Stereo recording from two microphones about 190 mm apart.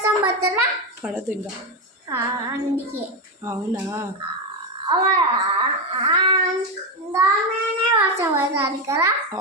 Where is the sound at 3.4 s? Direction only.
15° right (ahead or behind).